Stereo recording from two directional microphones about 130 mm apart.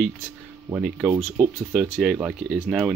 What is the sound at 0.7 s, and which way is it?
Speech, 5° right (ahead or behind).